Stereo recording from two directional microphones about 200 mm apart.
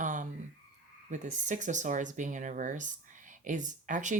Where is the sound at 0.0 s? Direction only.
40° right (ahead or behind).